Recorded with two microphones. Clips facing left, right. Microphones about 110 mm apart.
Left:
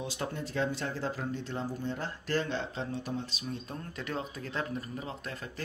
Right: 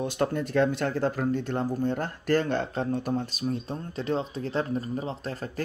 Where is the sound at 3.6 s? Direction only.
30° right (ahead or behind).